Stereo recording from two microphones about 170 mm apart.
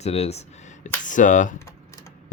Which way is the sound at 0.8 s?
50° left (ahead or behind).